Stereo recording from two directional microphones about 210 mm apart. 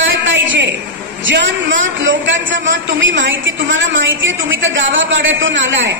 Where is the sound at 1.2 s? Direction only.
60° right (ahead or behind).